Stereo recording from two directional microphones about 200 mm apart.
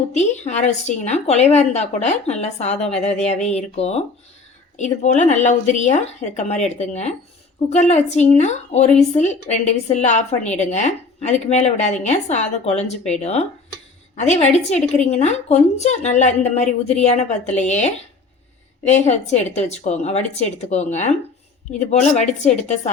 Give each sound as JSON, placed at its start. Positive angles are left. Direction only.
{"t": 0.1, "sound": "a woman's voice", "side_deg": 35}